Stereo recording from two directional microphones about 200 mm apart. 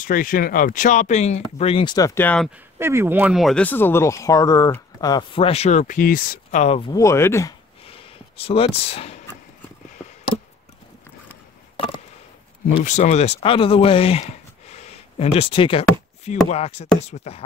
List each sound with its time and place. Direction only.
0.0 s speech: 45° left (ahead or behind); by 2.5 s 5° left (ahead or behind)
2.8 s speech: 10° right (ahead or behind); by 6.8 s 35° left (ahead or behind)
6.9 s speech: 15° left (ahead or behind)
7.8 s a sound: 30° left (ahead or behind)
11.7 s a sound: 25° left (ahead or behind)
12.8 s speech: 35° left (ahead or behind)